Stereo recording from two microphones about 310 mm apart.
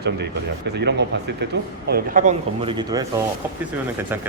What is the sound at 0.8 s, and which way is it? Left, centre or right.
Speech, right.